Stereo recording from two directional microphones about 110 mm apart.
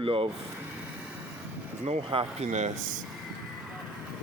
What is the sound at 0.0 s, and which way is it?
Speech, 55° right (ahead or behind).